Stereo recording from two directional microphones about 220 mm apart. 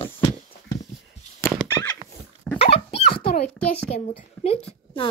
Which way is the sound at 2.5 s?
25° left (ahead or behind).